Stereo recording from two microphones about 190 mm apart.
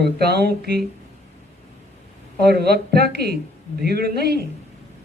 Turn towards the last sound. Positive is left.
turn(degrees=-55)  # may be behind; listen again after turning